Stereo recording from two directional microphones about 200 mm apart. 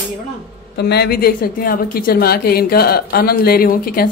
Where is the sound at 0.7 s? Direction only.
55° left (ahead or behind).